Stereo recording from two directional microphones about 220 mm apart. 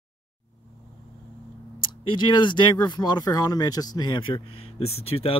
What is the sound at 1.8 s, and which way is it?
Speech, 20° left (ahead or behind).